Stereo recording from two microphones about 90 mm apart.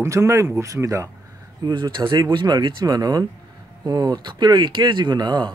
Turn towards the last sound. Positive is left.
turn(degrees=-55)  # may be behind; listen again after turning